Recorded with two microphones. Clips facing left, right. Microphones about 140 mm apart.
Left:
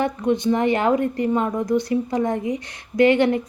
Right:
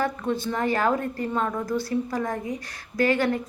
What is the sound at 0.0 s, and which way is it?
A woman's voice, 20° left (ahead or behind).